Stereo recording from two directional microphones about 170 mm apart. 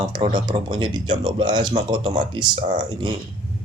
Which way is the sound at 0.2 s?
25° right (ahead or behind).